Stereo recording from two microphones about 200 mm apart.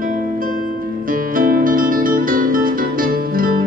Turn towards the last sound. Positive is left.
turn(degrees=-45)  # may be behind; listen again after turning